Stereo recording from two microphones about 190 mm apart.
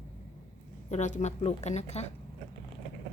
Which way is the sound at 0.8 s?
40° left (ahead or behind).